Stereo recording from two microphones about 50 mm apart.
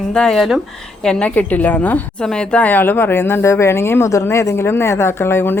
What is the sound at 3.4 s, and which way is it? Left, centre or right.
Speech, left.